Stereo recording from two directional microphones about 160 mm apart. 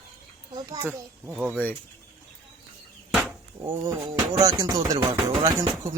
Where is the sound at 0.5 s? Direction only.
25° right (ahead or behind).